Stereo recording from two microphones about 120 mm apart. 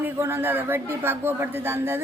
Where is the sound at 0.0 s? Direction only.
20° right (ahead or behind).